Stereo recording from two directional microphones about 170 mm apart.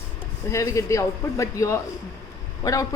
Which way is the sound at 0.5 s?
20° left (ahead or behind).